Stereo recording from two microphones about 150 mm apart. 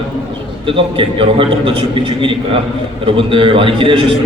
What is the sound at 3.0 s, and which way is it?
A man's voice, 35° right (ahead or behind).